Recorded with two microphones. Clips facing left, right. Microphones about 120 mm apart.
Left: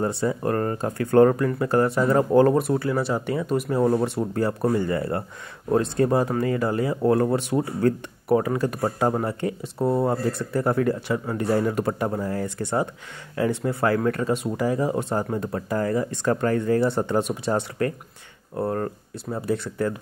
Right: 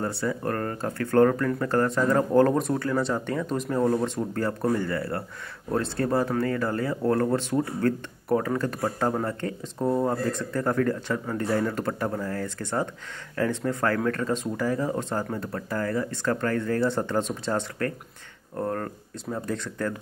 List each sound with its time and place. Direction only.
0.0 s speech: 20° left (ahead or behind)